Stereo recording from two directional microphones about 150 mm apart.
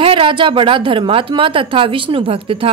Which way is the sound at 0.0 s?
35° right (ahead or behind).